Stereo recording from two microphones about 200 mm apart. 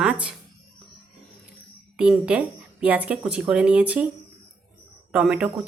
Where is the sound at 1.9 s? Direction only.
5° right (ahead or behind).